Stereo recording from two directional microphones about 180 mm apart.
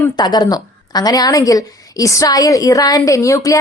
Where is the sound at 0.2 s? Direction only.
20° left (ahead or behind).